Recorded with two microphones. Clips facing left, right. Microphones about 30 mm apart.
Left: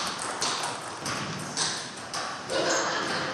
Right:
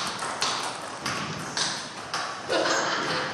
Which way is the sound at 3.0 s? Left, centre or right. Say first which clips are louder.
Right 2 dB; centre.